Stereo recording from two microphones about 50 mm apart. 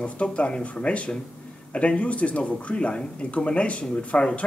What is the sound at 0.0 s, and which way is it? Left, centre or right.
Speech, left.